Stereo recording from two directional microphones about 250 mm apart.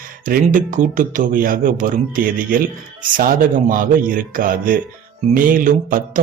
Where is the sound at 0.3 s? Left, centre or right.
Right.